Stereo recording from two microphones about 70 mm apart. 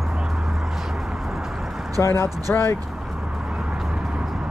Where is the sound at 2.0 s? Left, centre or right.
Left.